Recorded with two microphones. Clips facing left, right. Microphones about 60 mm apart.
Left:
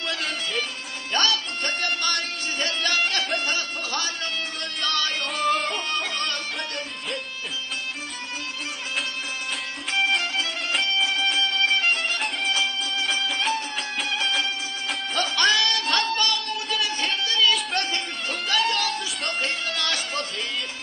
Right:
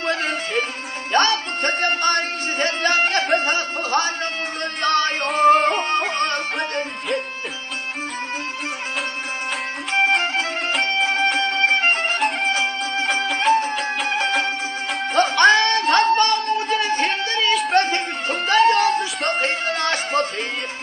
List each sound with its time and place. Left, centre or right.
0.0 s music: right
9.9 s music: right